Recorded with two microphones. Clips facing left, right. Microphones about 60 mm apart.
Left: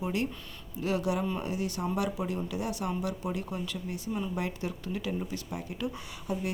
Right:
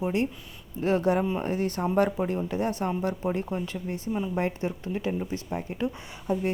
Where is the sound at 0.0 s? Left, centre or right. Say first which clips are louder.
Right 5 dB; right.